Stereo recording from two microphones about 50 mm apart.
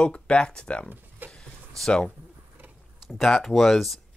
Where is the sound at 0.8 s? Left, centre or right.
Right.